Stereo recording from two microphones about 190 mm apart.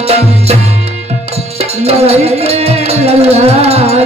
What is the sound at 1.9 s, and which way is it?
Music, 35° right (ahead or behind).